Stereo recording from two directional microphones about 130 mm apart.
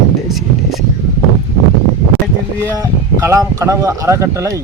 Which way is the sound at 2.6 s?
20° right (ahead or behind).